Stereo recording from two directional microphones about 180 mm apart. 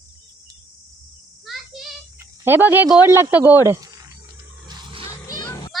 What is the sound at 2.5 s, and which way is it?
Speech, 10° right (ahead or behind).